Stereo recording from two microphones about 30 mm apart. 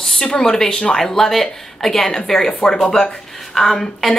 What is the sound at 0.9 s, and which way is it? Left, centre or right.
Speech, centre.